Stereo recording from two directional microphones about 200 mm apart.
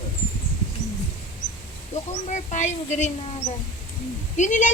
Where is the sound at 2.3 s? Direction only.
35° left (ahead or behind).